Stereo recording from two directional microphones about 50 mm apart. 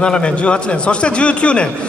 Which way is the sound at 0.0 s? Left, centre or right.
Left.